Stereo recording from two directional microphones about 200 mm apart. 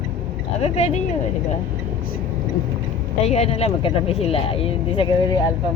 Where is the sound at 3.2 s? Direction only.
30° left (ahead or behind).